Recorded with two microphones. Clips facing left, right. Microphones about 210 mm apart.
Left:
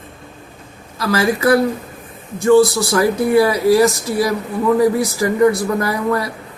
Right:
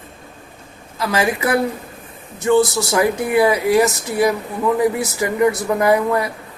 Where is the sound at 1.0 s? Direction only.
15° right (ahead or behind).